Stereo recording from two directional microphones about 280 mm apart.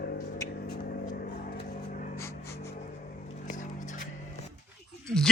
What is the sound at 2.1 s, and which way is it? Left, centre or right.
Music, centre.